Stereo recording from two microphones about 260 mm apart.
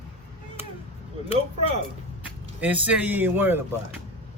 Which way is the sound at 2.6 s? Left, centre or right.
Centre.